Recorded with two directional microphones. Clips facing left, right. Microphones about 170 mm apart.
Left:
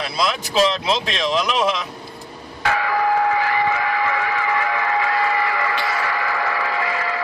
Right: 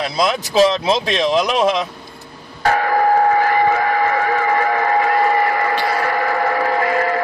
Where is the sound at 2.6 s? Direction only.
45° right (ahead or behind).